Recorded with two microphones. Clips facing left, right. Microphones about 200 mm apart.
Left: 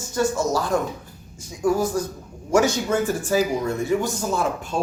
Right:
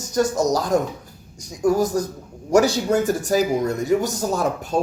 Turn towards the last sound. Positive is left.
turn(degrees=-40)  # may be behind; listen again after turning